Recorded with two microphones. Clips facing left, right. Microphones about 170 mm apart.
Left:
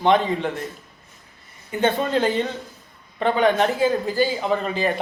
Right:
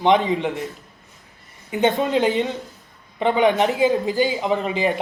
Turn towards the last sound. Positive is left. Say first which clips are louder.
# right 1 dB
turn(degrees=-15)  # may be behind; listen again after turning